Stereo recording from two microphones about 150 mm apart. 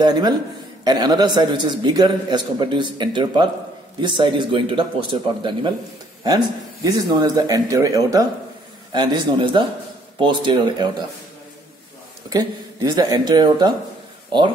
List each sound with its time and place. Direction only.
0.0 s a man's voice: 25° right (ahead or behind)
12.3 s a man's voice: 25° right (ahead or behind)